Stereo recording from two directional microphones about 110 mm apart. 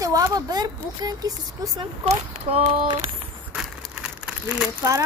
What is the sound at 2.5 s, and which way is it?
Speech, 70° right (ahead or behind).